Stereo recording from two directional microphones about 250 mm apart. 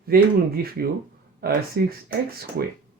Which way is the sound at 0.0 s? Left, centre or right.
Right.